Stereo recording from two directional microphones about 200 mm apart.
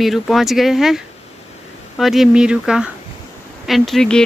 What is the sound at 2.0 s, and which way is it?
Speech, centre (ahead or behind).